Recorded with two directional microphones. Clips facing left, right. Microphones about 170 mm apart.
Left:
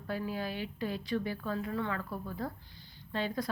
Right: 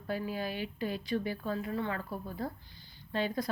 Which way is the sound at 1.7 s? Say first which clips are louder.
Even; 25° right (ahead or behind).